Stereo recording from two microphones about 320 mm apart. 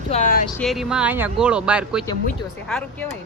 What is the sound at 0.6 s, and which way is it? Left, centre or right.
Speech, centre.